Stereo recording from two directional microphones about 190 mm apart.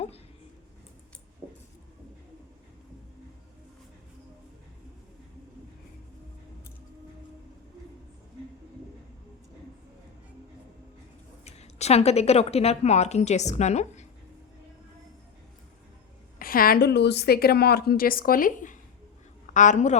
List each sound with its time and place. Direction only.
11.4 s a woman's voice: 35° left (ahead or behind)
16.4 s a woman's voice: 50° left (ahead or behind)